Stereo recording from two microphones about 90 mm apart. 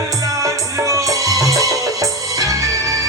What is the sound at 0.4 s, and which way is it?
Music, 35° right (ahead or behind).